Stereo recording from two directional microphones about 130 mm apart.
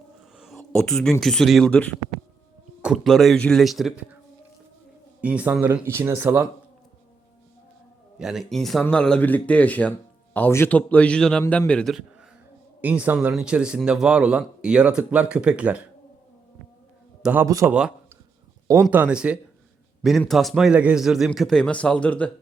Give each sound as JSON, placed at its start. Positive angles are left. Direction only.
{"t": 0.3, "sound": "a sound", "side_deg": 0}
{"t": 1.2, "sound": "a man's voice", "side_deg": 5}
{"t": 5.2, "sound": "speech", "side_deg": -10}
{"t": 8.2, "sound": "speech", "side_deg": -5}
{"t": 12.8, "sound": "speech", "side_deg": -10}
{"t": 17.4, "sound": "a man's voice", "side_deg": -25}
{"t": 17.7, "sound": "a man's voice", "side_deg": -5}